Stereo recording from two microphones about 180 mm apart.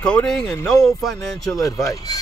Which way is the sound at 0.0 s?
5° left (ahead or behind).